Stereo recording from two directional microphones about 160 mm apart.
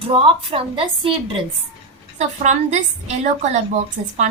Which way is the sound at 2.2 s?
45° right (ahead or behind).